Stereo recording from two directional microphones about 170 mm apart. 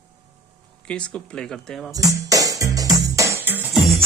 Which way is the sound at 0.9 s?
5° left (ahead or behind).